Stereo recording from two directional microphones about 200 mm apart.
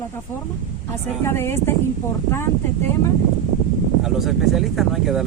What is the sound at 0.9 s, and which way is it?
Speech, 15° left (ahead or behind).